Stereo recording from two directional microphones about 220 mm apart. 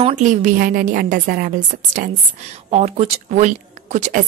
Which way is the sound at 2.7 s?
30° right (ahead or behind).